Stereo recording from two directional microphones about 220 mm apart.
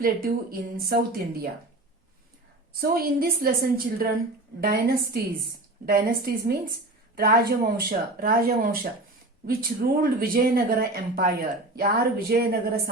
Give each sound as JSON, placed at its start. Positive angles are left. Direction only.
{"t": 0.0, "sound": "a woman's voice", "side_deg": -40}
{"t": 2.8, "sound": "a woman's voice", "side_deg": -45}